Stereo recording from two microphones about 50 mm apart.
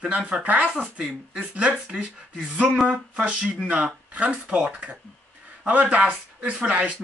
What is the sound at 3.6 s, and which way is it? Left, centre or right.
Speech, right.